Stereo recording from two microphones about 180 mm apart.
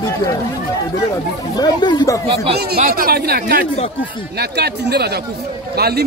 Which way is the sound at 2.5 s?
60° right (ahead or behind).